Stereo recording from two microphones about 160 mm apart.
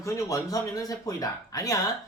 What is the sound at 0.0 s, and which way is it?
Speech, 20° left (ahead or behind).